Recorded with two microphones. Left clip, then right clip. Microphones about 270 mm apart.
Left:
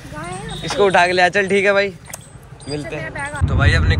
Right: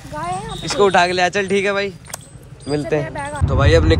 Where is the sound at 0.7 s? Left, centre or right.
Centre.